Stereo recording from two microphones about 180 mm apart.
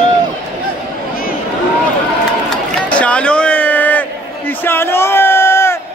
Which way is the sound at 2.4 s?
5° left (ahead or behind).